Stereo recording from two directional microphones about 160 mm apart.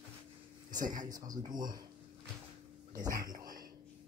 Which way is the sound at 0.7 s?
25° right (ahead or behind).